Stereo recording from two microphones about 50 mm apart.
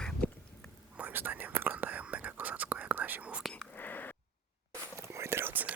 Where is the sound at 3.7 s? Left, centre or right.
Left.